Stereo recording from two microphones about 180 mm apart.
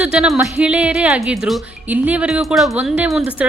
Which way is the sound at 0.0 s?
5° right (ahead or behind).